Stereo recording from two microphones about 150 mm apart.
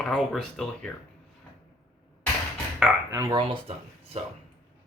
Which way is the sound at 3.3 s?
35° right (ahead or behind).